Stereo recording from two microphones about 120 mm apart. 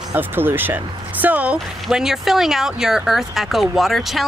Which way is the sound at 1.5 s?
Centre (ahead or behind).